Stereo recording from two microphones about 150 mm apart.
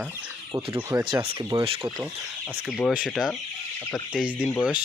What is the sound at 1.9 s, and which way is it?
Speech, 5° right (ahead or behind).